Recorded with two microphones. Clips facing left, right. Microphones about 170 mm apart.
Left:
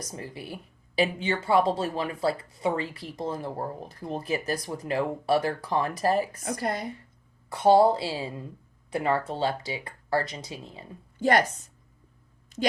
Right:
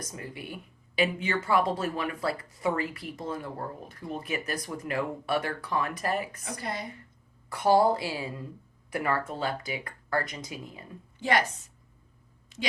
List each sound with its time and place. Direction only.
0.0 s speech: 35° left (ahead or behind)
7.5 s speech: 25° left (ahead or behind)
11.2 s a woman's voice: 45° left (ahead or behind)